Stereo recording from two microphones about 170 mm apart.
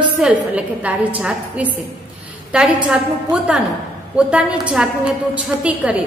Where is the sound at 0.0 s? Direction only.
10° right (ahead or behind).